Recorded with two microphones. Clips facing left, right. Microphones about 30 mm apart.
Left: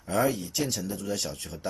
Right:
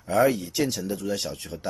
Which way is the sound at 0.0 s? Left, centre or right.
Centre.